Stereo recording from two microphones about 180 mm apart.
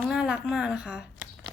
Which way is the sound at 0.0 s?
Centre (ahead or behind).